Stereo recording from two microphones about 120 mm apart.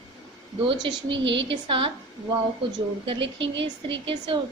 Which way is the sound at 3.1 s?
45° right (ahead or behind).